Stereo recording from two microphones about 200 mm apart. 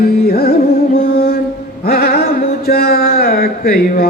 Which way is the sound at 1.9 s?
50° left (ahead or behind).